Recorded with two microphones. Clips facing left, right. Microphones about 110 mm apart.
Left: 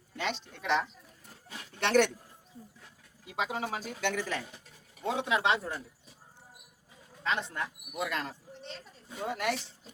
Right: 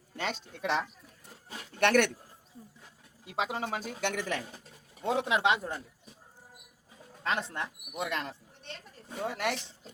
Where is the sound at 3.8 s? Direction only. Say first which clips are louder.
Even; 60° right (ahead or behind).